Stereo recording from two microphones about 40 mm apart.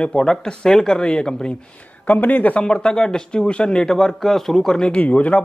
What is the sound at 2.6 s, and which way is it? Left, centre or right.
A man's voice, left.